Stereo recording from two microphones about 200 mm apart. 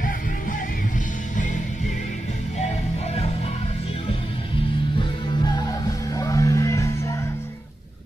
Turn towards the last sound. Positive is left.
turn(degrees=10)  # may be behind; listen again after turning